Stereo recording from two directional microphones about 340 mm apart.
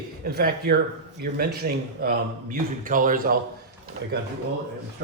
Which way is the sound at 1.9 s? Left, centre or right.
Right.